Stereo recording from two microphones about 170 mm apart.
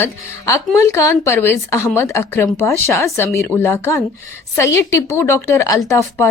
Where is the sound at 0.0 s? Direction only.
15° left (ahead or behind).